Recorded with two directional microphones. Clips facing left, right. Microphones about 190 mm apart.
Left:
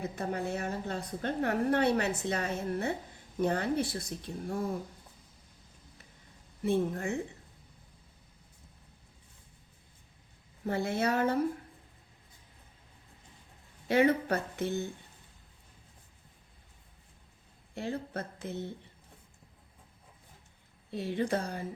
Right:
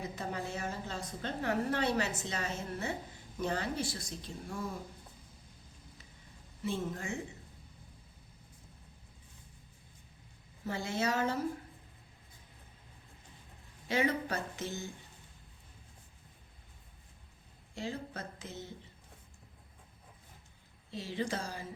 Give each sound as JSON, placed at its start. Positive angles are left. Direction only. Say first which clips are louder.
{"t": 0.0, "sound": "a woman's voice", "louder": "left 5 dB", "side_deg": 55}
{"t": 4.4, "sound": "speech", "louder": "left 7 dB", "side_deg": 35}
{"t": 6.6, "sound": "a woman's voice", "louder": "left 8 dB", "side_deg": 60}
{"t": 10.7, "sound": "a woman's voice", "louder": "left 4 dB", "side_deg": 60}
{"t": 13.8, "sound": "a woman's voice", "louder": "left 6 dB", "side_deg": 55}
{"t": 17.7, "sound": "a woman's voice", "louder": "left 4 dB", "side_deg": 55}
{"t": 20.9, "sound": "a woman's voice", "louder": "left 5 dB", "side_deg": 60}